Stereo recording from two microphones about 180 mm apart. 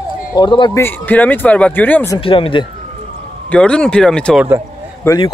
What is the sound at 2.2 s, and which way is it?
Speech, 30° left (ahead or behind).